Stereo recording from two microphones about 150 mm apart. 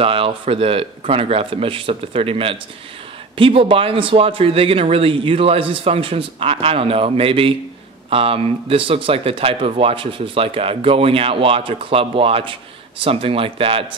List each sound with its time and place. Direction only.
0.0 s speech: 35° right (ahead or behind)